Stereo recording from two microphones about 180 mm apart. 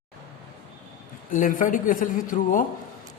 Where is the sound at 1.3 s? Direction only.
45° left (ahead or behind).